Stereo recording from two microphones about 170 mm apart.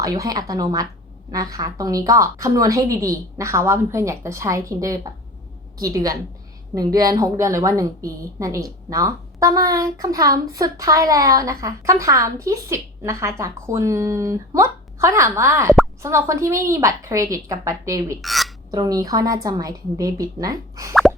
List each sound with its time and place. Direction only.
0.0 s a woman's voice: 20° right (ahead or behind)
18.2 s speech: centre (ahead or behind)
18.7 s a woman's voice: 20° right (ahead or behind)